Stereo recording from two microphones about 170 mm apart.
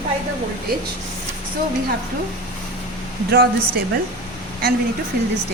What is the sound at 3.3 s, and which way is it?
Speech, 60° right (ahead or behind).